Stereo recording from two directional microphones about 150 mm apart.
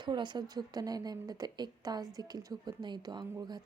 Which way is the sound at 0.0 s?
30° right (ahead or behind).